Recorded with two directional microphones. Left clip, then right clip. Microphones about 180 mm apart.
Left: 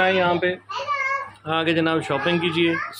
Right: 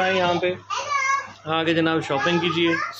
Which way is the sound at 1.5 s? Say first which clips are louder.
Even; 10° left (ahead or behind).